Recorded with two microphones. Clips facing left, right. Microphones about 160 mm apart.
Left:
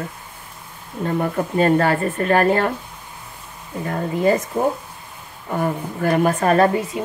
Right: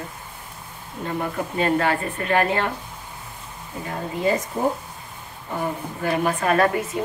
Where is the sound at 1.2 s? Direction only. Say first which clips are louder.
Left 5 dB; 40° left (ahead or behind).